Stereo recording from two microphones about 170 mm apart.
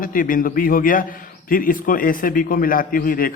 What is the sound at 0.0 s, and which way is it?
A man's voice, 55° left (ahead or behind).